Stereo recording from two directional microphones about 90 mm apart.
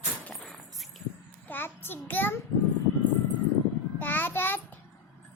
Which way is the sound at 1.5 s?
25° left (ahead or behind).